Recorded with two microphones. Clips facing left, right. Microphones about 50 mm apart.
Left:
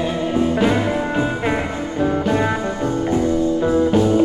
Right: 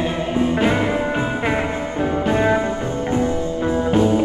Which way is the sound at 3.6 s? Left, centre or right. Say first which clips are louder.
Right 1 dB; right.